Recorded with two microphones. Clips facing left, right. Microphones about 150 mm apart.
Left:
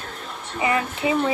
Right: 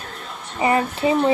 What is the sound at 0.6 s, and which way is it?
Speech, 35° right (ahead or behind).